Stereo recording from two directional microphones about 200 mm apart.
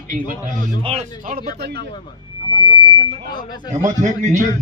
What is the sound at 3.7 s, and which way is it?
Speech, 40° right (ahead or behind).